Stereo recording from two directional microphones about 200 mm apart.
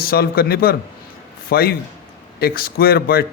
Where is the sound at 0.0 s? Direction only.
50° left (ahead or behind).